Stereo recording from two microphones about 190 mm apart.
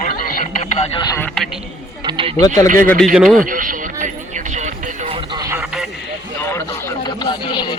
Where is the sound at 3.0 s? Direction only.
Centre (ahead or behind).